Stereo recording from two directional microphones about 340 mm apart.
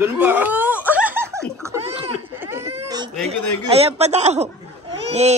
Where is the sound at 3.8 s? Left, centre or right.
Centre.